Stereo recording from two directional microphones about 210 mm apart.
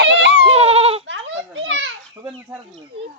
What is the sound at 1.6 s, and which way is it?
Children playing, 65° right (ahead or behind).